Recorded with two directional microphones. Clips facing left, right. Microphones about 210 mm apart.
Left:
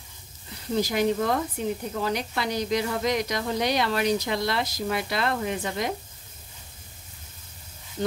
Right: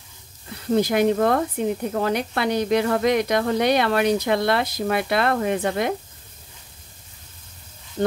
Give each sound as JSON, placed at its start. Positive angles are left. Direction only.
{"t": 0.7, "sound": "speech", "side_deg": -55}